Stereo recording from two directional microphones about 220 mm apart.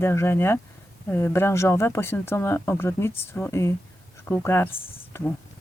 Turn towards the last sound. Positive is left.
turn(degrees=10)  # may be behind; listen again after turning